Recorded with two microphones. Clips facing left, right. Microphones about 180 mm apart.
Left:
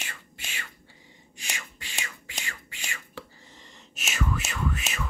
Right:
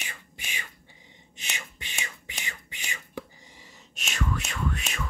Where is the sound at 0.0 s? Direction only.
15° right (ahead or behind).